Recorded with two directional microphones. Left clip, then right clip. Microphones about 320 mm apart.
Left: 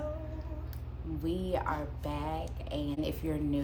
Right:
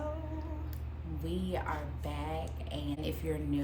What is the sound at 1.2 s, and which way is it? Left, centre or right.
Speech, centre.